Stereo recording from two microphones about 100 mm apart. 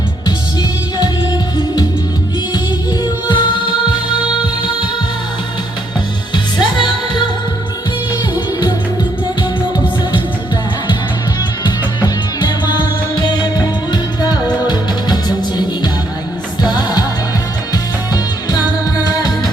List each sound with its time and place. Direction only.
3.0 s music: 55° left (ahead or behind)
6.3 s music: 50° left (ahead or behind)
12.0 s music: 50° left (ahead or behind)
19.0 s music: 40° left (ahead or behind)